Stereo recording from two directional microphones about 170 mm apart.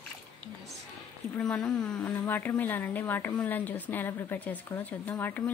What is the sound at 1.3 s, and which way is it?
A woman's voice, 5° left (ahead or behind).